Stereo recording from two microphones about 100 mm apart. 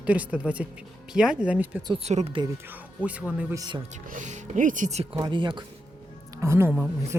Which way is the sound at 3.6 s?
45° right (ahead or behind).